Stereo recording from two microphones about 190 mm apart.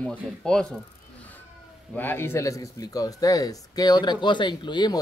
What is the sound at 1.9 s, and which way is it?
Speech, 10° left (ahead or behind).